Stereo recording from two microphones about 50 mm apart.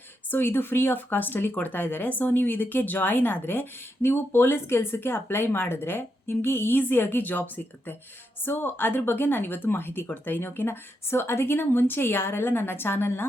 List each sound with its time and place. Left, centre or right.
0.3 s speech: left